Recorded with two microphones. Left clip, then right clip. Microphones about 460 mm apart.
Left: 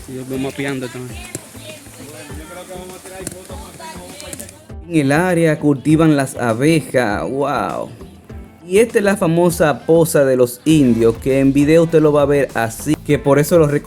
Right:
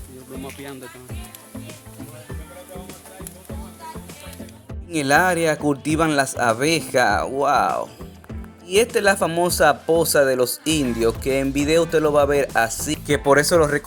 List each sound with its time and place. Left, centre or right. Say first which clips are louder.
0.4 s speech: left 13 dB; right
4.9 s speech: left 2 dB; right